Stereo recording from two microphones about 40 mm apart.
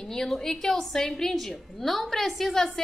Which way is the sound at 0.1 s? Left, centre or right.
Centre.